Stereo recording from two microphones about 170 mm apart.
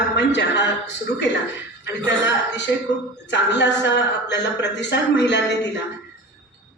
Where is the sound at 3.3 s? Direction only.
90° left.